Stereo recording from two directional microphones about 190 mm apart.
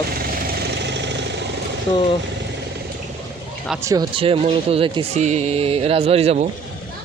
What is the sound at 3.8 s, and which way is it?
Speech, 15° right (ahead or behind).